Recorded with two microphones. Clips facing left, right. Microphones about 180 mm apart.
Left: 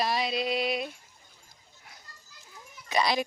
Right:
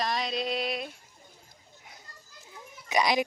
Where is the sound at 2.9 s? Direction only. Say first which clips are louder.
Right 1 dB; 15° right (ahead or behind).